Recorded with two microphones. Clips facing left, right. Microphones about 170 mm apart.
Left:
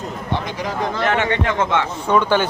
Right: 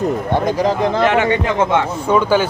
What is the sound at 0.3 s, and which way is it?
Speech, 45° right (ahead or behind).